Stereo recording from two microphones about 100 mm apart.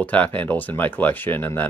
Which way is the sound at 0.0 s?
15° left (ahead or behind).